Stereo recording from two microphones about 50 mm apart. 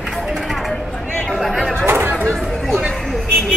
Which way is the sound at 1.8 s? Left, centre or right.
Right.